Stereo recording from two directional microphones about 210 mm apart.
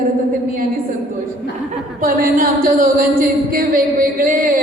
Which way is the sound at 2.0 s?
40° right (ahead or behind).